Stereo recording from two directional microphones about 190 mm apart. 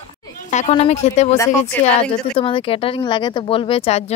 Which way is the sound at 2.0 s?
25° left (ahead or behind).